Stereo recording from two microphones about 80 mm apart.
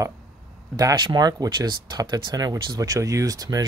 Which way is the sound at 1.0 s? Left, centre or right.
Right.